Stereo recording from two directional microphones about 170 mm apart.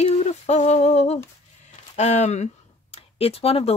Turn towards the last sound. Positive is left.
turn(degrees=35)  # may be behind; listen again after turning